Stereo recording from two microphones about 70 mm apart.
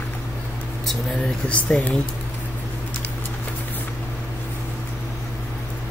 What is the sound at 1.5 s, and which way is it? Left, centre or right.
Speech, centre.